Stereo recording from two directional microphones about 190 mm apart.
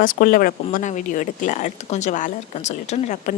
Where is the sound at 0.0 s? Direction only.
45° left (ahead or behind).